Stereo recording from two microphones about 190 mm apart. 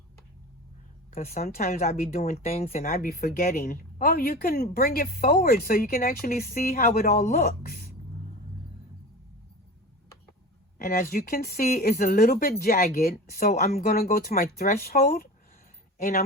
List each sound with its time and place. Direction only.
1.1 s speech: 35° left (ahead or behind)
1.4 s speech: 50° left (ahead or behind)
1.6 s speech: 35° left (ahead or behind)
2.3 s speech: 35° left (ahead or behind); by 7.9 s 50° left (ahead or behind)
10.8 s speech: 45° left (ahead or behind)